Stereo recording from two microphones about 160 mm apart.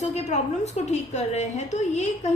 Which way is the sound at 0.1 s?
45° left (ahead or behind).